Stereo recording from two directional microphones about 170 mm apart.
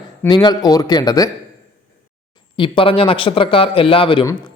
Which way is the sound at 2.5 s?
30° left (ahead or behind).